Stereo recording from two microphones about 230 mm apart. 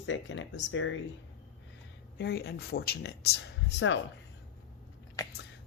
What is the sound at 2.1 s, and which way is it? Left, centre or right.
Speech, left.